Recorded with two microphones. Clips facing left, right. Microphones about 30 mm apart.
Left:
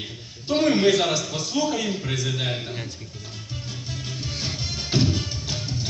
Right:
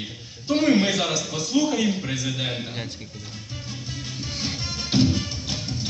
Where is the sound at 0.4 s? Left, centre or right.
Centre.